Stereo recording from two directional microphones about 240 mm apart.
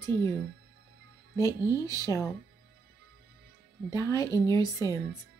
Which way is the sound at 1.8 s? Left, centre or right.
Centre.